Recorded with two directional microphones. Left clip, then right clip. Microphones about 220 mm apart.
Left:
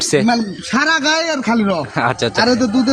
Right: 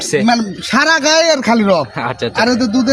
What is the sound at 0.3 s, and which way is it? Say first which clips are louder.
A man's voice: right 3 dB; 40° right (ahead or behind).